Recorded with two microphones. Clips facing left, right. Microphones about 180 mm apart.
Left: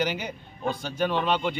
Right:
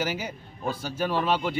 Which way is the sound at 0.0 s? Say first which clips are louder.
Left 2 dB; 5° right (ahead or behind).